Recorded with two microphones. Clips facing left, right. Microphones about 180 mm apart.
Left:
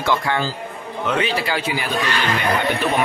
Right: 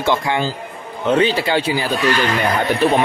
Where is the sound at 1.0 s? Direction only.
30° right (ahead or behind).